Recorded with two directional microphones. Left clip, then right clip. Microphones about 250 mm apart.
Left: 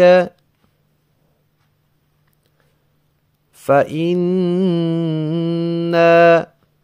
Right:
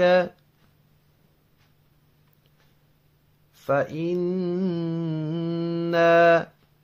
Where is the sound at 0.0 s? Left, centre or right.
Left.